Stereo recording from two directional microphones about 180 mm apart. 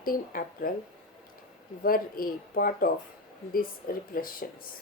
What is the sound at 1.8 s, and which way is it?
A woman's voice, 55° left (ahead or behind).